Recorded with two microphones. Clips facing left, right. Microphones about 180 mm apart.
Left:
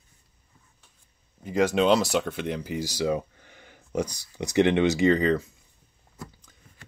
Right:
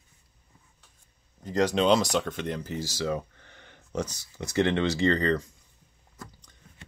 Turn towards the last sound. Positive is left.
turn(degrees=10)  # may be behind; listen again after turning